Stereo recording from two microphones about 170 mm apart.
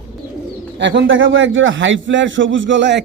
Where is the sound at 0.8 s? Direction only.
90° right.